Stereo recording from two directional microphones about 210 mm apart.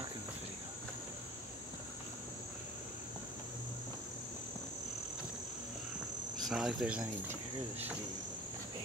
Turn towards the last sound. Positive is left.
turn(degrees=-5)  # may be behind; listen again after turning